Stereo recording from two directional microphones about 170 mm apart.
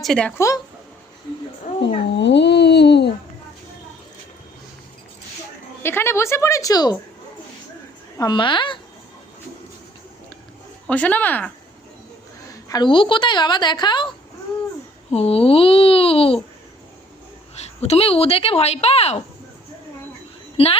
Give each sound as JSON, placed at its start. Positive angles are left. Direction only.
{"t": 0.0, "sound": "speech", "side_deg": 5}
{"t": 0.3, "sound": "a woman's voice", "side_deg": 20}
{"t": 2.1, "sound": "speech", "side_deg": 90}
{"t": 5.8, "sound": "a woman's voice", "side_deg": 15}
{"t": 8.2, "sound": "a woman's voice", "side_deg": 25}
{"t": 10.8, "sound": "a woman's voice", "side_deg": 10}
{"t": 12.6, "sound": "a woman's voice", "side_deg": 25}
{"t": 15.1, "sound": "speech", "side_deg": 35}
{"t": 17.5, "sound": "a woman's voice", "side_deg": 40}